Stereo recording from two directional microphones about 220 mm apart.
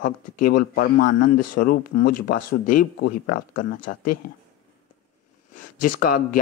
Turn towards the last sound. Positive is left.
turn(degrees=40)  # may be behind; listen again after turning